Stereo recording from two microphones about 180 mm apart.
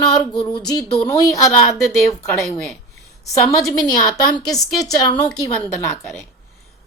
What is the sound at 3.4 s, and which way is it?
A woman's voice, 20° left (ahead or behind).